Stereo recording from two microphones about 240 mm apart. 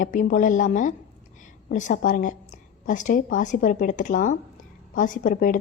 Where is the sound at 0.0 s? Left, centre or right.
Left.